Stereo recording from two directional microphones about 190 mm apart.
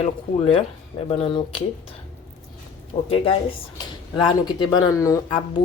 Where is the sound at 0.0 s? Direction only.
30° left (ahead or behind).